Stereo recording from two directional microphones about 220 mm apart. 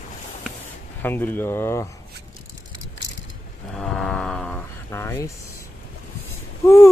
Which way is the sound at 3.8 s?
Centre (ahead or behind).